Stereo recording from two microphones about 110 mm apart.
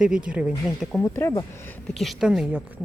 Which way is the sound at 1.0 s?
25° left (ahead or behind).